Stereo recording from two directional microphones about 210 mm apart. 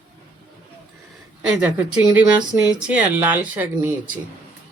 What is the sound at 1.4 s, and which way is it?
Speech, 5° right (ahead or behind).